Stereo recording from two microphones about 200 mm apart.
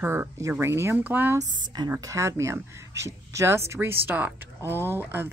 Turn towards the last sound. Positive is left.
turn(degrees=-10)  # may be behind; listen again after turning